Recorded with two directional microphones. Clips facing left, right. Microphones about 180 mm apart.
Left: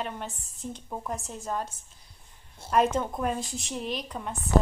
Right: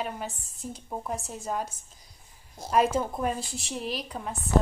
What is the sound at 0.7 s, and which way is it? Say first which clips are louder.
Speech: right 2 dB; 5° right (ahead or behind).